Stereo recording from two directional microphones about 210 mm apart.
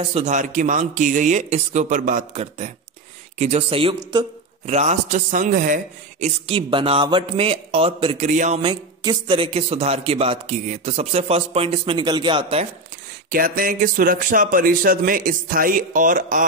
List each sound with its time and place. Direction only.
0.1 s speech: 35° right (ahead or behind)
4.7 s a man's voice: 35° right (ahead or behind)
13.3 s speech: 45° right (ahead or behind)